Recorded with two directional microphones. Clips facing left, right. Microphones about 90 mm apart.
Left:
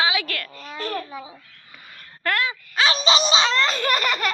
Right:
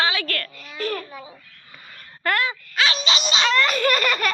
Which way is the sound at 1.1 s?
15° left (ahead or behind).